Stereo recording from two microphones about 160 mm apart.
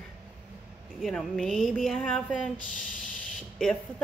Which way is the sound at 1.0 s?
Centre (ahead or behind).